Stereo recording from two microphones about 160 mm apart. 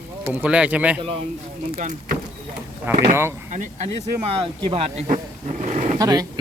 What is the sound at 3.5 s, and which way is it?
Speech, 50° right (ahead or behind).